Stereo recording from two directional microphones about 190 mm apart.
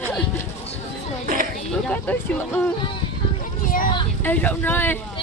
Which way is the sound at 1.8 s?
10° left (ahead or behind).